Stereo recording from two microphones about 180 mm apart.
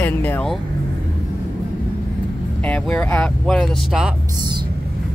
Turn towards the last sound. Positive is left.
turn(degrees=0)  # may be behind; listen again after turning